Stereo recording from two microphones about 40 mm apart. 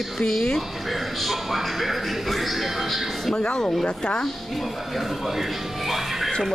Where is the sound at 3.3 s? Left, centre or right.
Left.